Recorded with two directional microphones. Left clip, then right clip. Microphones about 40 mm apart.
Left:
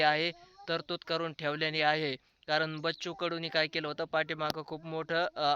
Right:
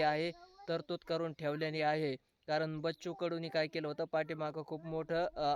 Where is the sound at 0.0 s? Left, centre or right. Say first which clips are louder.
Left 5 dB; right.